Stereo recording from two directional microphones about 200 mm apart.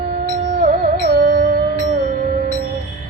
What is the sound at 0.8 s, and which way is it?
Music, 50° right (ahead or behind).